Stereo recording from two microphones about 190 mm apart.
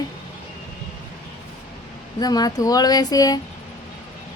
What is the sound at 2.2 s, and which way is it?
A woman's voice, 20° left (ahead or behind).